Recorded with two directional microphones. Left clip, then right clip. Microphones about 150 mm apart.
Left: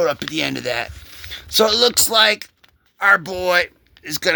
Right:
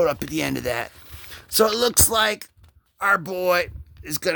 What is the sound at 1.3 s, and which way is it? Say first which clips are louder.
Speech: left 4 dB; 40° right (ahead or behind).